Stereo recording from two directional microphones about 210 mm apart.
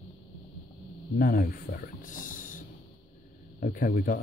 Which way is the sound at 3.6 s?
40° left (ahead or behind).